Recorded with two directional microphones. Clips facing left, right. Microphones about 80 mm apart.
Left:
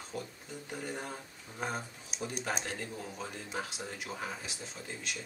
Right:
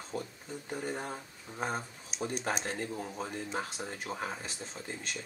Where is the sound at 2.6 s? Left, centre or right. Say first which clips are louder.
Right 3 dB; right.